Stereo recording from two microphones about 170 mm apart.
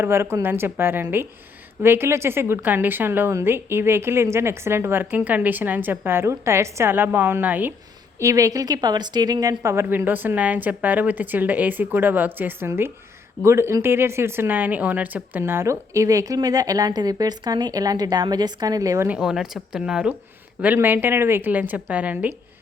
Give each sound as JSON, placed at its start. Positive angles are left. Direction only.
{"t": 0.0, "sound": "a woman's voice", "side_deg": -15}
{"t": 19.0, "sound": "a woman's voice", "side_deg": -5}